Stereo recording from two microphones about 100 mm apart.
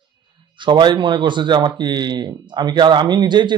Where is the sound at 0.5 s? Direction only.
55° right (ahead or behind).